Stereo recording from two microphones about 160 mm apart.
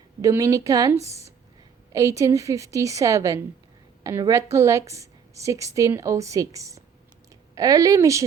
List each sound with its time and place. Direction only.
0.2 s a woman's voice: 20° right (ahead or behind)